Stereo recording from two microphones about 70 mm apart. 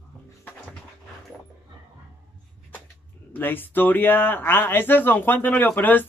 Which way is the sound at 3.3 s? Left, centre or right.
Left.